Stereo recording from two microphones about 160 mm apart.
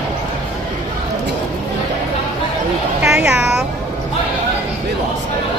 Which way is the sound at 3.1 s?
10° right (ahead or behind).